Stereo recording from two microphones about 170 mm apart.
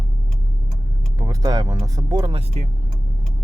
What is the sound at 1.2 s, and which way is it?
Speech, 20° right (ahead or behind).